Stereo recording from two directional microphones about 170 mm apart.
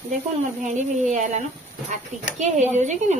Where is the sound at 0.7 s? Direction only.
45° right (ahead or behind).